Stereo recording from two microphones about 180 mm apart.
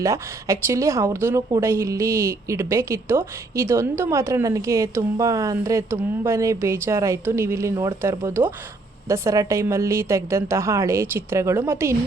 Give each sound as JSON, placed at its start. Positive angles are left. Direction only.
{"t": 0.0, "sound": "speech", "side_deg": -15}